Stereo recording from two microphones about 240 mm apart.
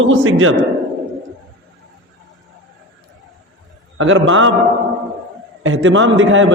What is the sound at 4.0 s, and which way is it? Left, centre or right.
Speech, right.